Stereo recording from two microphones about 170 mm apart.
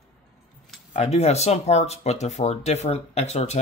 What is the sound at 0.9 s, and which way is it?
Speech, 40° left (ahead or behind).